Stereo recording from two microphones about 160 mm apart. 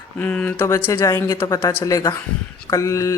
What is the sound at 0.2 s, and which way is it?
Speech, 10° left (ahead or behind).